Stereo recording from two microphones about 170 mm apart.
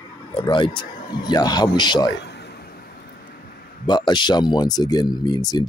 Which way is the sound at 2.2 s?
75° left (ahead or behind).